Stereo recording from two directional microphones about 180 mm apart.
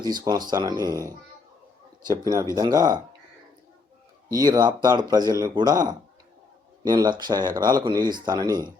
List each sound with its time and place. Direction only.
0.0 s speech: 25° right (ahead or behind)
2.0 s speech: 20° right (ahead or behind)
4.4 s speech: 20° right (ahead or behind)
6.8 s speech: 20° right (ahead or behind)